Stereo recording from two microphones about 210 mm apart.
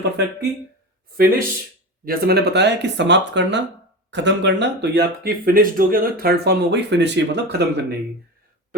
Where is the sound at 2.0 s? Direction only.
50° right (ahead or behind).